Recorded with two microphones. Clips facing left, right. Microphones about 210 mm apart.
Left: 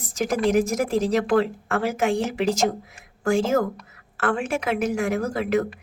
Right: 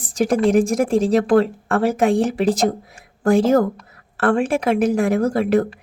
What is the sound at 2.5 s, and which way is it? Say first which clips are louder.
Speech: right 4 dB; 30° right (ahead or behind).